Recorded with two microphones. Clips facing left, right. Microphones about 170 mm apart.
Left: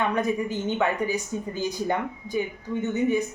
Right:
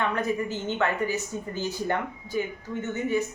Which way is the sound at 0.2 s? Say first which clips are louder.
Left 2 dB; 15° left (ahead or behind).